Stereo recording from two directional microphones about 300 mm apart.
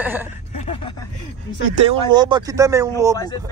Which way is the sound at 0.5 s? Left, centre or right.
Centre.